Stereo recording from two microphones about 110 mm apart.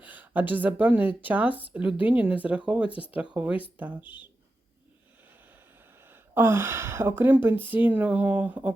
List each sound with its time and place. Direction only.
0.0 s speech: 15° right (ahead or behind)
6.0 s speech: 20° right (ahead or behind)